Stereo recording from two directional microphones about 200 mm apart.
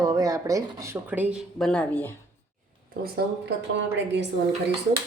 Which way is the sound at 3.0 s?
50° right (ahead or behind).